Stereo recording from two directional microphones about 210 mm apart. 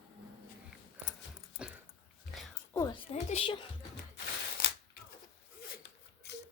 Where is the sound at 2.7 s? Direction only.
15° left (ahead or behind).